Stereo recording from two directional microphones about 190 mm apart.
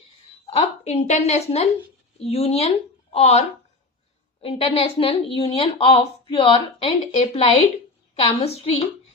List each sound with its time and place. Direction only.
0.5 s a woman's voice: 35° left (ahead or behind)